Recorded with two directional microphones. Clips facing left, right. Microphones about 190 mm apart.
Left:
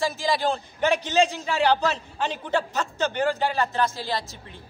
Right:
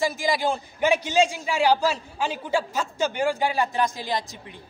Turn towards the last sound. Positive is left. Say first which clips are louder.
# right 1 dB
turn(degrees=-15)  # may be behind; listen again after turning